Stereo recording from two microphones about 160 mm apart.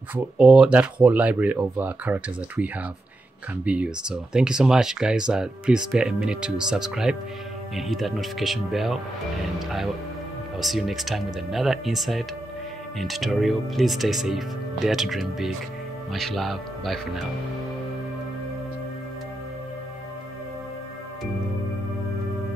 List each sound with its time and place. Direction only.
0.1 s speech: 5° right (ahead or behind)
10.6 s speech: centre (ahead or behind)